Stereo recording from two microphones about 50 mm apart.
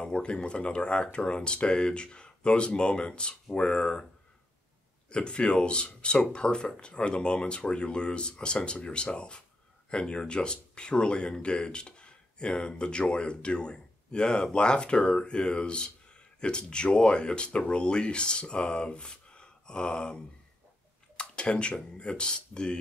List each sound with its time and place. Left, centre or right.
0.0 s speech: centre
5.1 s speech: centre
21.2 s a sound: centre
21.7 s speech: centre